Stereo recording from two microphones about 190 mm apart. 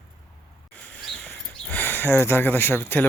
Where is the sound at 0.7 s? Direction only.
10° left (ahead or behind).